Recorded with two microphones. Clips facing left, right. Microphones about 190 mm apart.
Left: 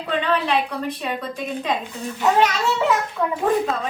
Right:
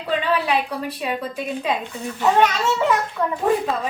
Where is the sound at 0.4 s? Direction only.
10° right (ahead or behind).